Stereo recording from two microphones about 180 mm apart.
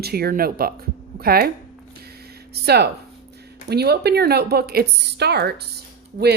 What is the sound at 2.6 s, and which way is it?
A woman's voice, 65° right (ahead or behind).